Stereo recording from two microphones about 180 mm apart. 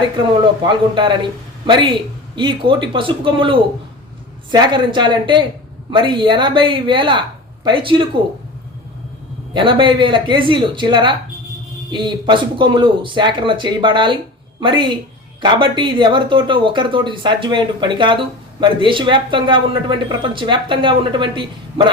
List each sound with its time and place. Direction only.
0.7 s speech: 25° right (ahead or behind)
9.6 s speech: 25° right (ahead or behind)